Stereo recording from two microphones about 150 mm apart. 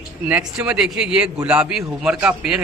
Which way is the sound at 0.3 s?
5° right (ahead or behind).